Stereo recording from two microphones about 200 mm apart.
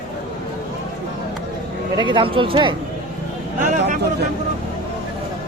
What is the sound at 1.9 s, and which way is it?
Speech, 25° right (ahead or behind).